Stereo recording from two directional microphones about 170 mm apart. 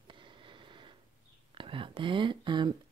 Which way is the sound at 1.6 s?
30° right (ahead or behind).